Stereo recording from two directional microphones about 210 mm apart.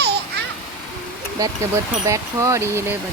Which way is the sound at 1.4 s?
15° right (ahead or behind).